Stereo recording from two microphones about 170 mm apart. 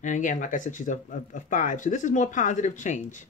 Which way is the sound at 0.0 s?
50° left (ahead or behind).